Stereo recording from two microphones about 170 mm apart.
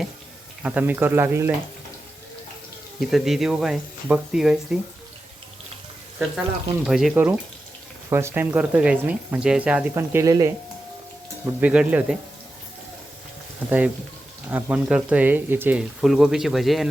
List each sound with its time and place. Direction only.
0.6 s speech: 10° right (ahead or behind)
3.0 s speech: centre (ahead or behind)
6.8 s speech: 5° right (ahead or behind); by 10.5 s 20° right (ahead or behind)
11.4 s speech: 10° right (ahead or behind)
13.7 s speech: 10° right (ahead or behind)